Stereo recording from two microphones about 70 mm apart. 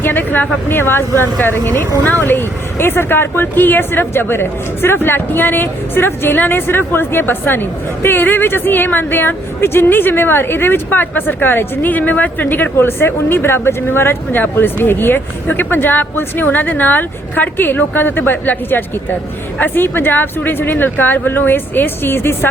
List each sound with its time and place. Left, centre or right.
0.0 s speech: left